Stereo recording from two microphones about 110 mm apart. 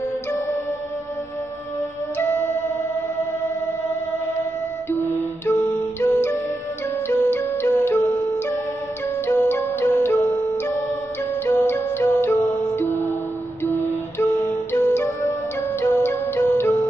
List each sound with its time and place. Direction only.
2.1 s music: 25° left (ahead or behind)
4.9 s music: 25° left (ahead or behind)
9.2 s music: 20° left (ahead or behind)